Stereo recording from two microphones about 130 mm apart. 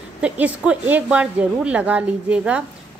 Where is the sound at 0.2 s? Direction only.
10° right (ahead or behind).